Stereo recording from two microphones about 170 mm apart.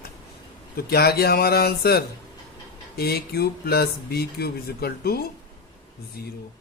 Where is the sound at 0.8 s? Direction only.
65° left (ahead or behind).